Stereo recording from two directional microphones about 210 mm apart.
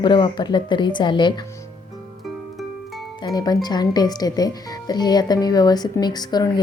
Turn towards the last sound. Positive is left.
turn(degrees=20)  # may be behind; listen again after turning